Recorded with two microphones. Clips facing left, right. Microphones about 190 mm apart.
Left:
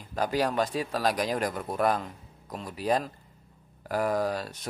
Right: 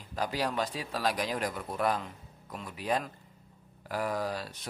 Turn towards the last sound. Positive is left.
turn(degrees=45)  # may be behind; listen again after turning